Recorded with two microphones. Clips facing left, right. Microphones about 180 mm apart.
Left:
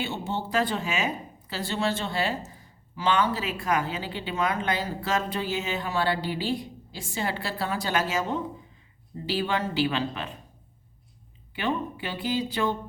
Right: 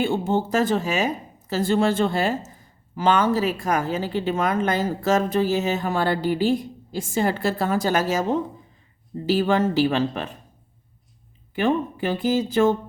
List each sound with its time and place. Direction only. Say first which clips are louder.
0.0 s speech: right 9 dB; 50° right (ahead or behind)
11.5 s speech: right 7 dB; 45° right (ahead or behind)